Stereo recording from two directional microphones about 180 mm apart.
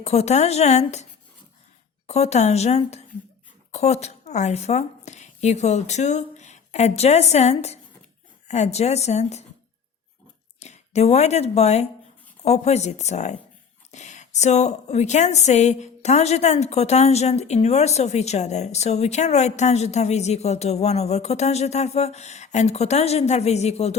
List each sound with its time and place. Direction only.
0.0 s a woman's voice: 35° left (ahead or behind)
2.0 s a woman's voice: 35° left (ahead or behind)
10.6 s a woman's voice: 35° left (ahead or behind)